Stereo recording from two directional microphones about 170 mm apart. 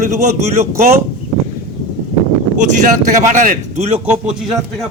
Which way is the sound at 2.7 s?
50° right (ahead or behind).